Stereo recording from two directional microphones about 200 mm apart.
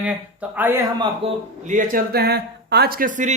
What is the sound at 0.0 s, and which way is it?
Speech, 10° right (ahead or behind).